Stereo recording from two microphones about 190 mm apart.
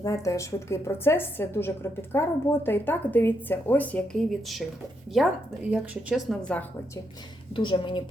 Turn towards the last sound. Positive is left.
turn(degrees=25)  # may be behind; listen again after turning